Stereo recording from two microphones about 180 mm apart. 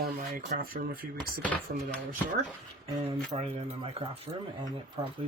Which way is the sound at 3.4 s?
35° right (ahead or behind).